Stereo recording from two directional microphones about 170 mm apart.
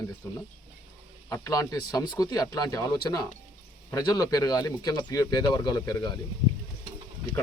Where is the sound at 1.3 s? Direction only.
20° left (ahead or behind).